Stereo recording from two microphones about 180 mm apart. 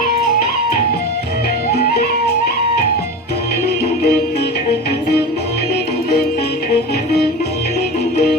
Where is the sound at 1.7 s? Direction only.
60° left (ahead or behind).